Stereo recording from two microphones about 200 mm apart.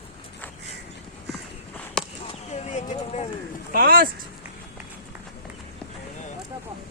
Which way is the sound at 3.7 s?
45° right (ahead or behind).